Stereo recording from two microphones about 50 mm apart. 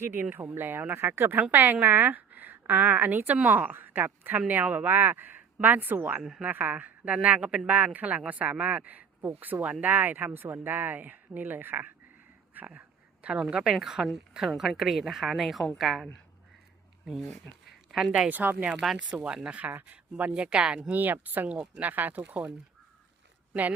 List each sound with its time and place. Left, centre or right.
0.0 s speech: right
1.1 s speech: right
1.5 s a woman's voice: right
3.3 s speech: right
3.6 s speech: right
4.4 s speech: right
13.2 s a woman's voice: centre
17.7 s a sound: centre
18.3 s speech: right
19.1 s speech: centre; by 20.3 s right
20.3 s speech: right
20.9 s speech: right